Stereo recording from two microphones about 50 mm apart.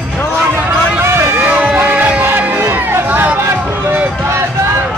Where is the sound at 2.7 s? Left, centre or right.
Right.